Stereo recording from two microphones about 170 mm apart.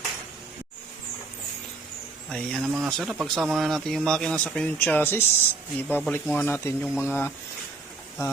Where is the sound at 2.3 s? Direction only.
Centre (ahead or behind).